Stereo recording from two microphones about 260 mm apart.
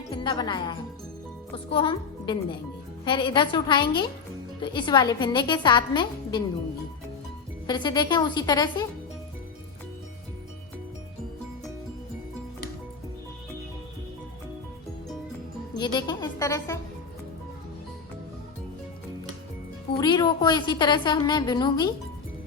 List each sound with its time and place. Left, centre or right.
0.1 s a woman's voice: centre
7.7 s a woman's voice: centre
15.7 s music: centre
20.0 s a woman's voice: centre